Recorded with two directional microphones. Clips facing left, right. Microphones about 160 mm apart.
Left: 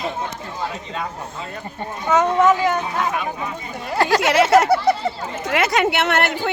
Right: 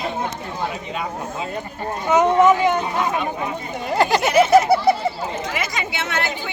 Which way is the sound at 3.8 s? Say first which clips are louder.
Even; 20° right (ahead or behind).